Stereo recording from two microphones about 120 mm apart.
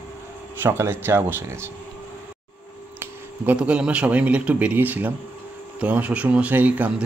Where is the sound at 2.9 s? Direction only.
15° right (ahead or behind).